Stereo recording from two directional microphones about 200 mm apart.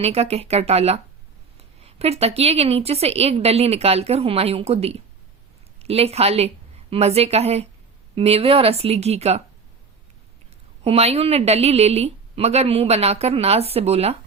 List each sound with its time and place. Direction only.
0.0 s a woman's voice: 30° right (ahead or behind)
10.8 s a woman's voice: 30° right (ahead or behind)